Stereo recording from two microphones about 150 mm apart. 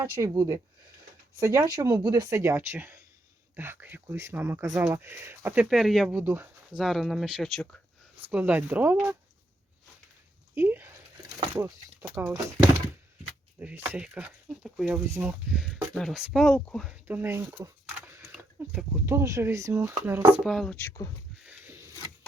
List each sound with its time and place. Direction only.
0.2 s speech: 20° right (ahead or behind); by 6.1 s centre (ahead or behind)
6.1 s speech: 15° right (ahead or behind)
6.8 s speech: centre (ahead or behind)
8.3 s speech: 10° right (ahead or behind)
10.5 s speech: 15° right (ahead or behind)
13.6 s speech: 10° right (ahead or behind); by 16.8 s 5° left (ahead or behind)
16.8 s speech: 10° right (ahead or behind)
18.3 s a sound: 5° right (ahead or behind)
19.0 s speech: 20° right (ahead or behind)
20.4 s speech: centre (ahead or behind)
20.7 s speech: 15° left (ahead or behind)